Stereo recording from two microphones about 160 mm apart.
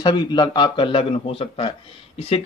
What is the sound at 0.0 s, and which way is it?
Speech, 25° left (ahead or behind).